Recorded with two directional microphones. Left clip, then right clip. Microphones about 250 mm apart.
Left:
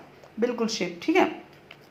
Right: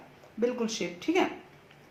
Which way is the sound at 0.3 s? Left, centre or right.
Centre.